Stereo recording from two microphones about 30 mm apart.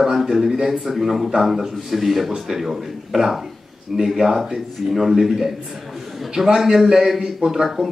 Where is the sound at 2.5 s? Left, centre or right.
Centre.